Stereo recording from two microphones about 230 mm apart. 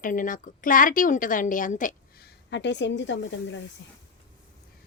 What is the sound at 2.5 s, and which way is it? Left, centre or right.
Speech, left.